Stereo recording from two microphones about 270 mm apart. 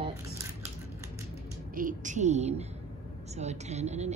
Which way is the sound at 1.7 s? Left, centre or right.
Right.